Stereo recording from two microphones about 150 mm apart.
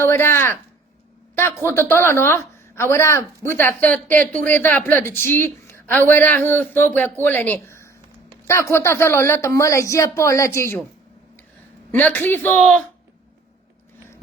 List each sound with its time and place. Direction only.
0.0 s a woman's voice: 15° left (ahead or behind)
11.9 s a woman's voice: 10° left (ahead or behind)